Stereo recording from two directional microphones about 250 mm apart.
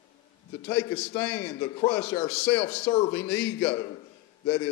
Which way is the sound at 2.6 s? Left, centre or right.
Left.